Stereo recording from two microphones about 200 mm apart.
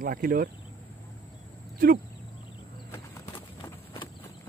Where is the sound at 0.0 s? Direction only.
45° right (ahead or behind).